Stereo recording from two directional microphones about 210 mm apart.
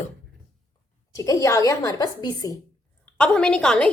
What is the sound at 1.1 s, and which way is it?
A woman's voice, 15° left (ahead or behind).